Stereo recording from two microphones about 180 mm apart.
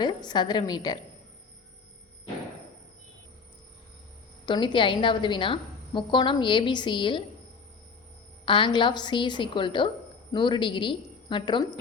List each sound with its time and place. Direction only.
0.0 s a woman's voice: 25° left (ahead or behind)
4.4 s a woman's voice: 25° left (ahead or behind)
8.4 s a woman's voice: 30° left (ahead or behind)